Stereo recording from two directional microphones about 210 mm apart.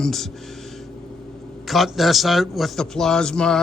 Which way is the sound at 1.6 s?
Centre (ahead or behind).